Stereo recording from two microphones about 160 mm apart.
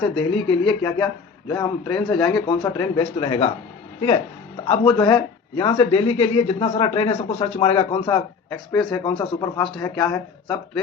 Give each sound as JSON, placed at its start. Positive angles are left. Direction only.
{"t": 0.2, "sound": "speech", "side_deg": 30}
{"t": 4.6, "sound": "speech", "side_deg": 35}